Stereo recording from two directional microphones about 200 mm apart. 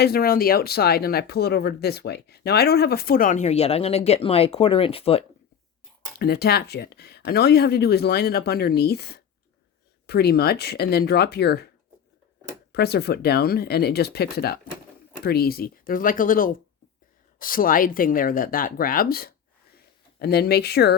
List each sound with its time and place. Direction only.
0.0 s speech: 50° left (ahead or behind); by 5.2 s 30° left (ahead or behind)
6.1 s speech: 50° left (ahead or behind)
12.7 s speech: 55° left (ahead or behind)